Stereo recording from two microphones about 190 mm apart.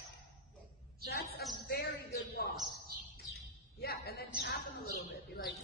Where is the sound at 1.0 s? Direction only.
55° left (ahead or behind).